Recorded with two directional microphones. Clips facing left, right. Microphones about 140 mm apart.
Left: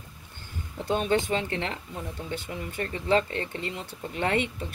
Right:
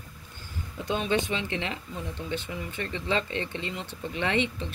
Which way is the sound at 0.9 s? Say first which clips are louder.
Left 2 dB; 45° left (ahead or behind).